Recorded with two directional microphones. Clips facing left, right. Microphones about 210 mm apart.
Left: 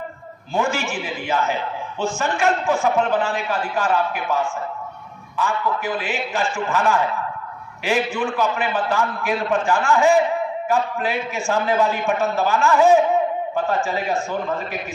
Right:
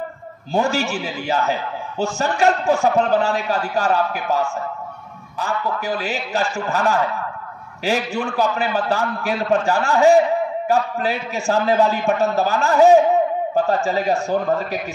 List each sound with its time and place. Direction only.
0.5 s a man's voice: 40° right (ahead or behind)